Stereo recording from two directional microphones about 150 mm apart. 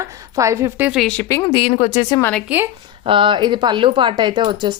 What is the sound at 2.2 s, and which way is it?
Speech, 10° left (ahead or behind).